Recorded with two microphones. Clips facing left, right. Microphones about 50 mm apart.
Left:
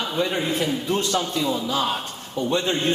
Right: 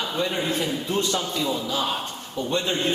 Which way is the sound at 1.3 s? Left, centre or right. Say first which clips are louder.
Left 2 dB; centre.